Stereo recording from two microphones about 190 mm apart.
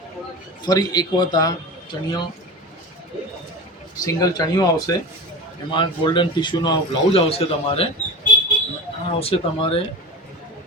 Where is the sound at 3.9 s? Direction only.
20° left (ahead or behind).